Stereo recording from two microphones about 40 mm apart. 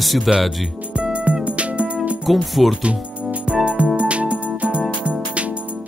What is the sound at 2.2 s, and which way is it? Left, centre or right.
Speech, centre.